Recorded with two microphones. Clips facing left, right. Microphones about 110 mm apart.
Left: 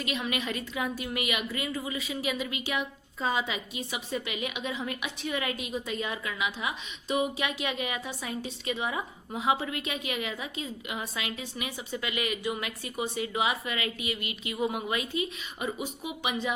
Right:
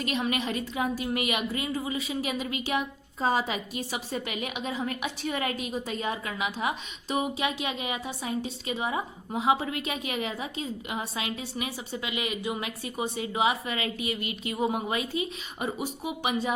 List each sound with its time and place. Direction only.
0.0 s a woman's voice: 40° right (ahead or behind)